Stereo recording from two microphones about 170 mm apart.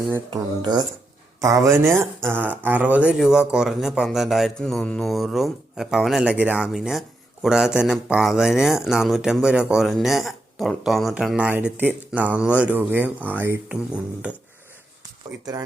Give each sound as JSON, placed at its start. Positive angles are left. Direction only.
{"t": 0.3, "sound": "a man's voice", "side_deg": -25}